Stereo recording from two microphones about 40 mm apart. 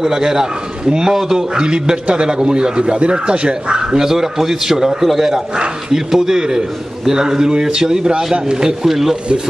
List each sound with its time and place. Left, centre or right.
0.0 s a man's voice: centre
1.6 s a man's voice: right